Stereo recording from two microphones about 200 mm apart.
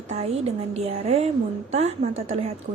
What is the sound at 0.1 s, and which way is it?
Speech, 30° right (ahead or behind).